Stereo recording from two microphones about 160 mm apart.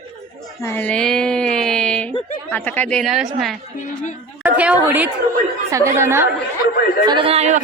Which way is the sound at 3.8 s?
50° left (ahead or behind).